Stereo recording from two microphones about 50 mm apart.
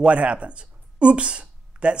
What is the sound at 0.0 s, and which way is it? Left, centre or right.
Speech, right.